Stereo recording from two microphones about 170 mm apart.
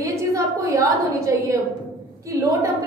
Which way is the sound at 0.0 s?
20° right (ahead or behind).